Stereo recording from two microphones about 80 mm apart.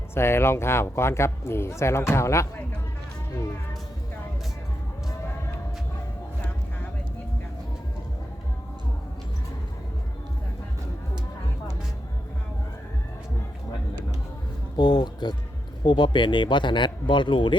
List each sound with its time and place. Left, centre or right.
0.1 s speech: left
14.8 s a sound: left
15.8 s speech: left